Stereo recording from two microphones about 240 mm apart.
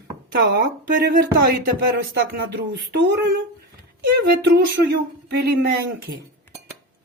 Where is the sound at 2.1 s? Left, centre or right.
Right.